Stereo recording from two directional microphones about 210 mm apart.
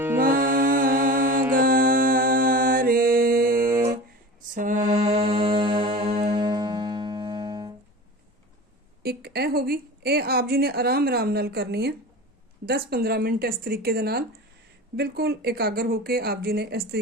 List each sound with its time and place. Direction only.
0.2 s music: 40° right (ahead or behind)
4.5 s mantra: 35° right (ahead or behind); by 7.7 s 20° right (ahead or behind)
9.0 s a woman's voice: 50° right (ahead or behind)